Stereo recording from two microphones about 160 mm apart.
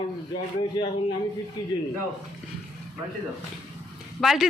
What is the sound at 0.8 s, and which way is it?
Speech, 25° left (ahead or behind).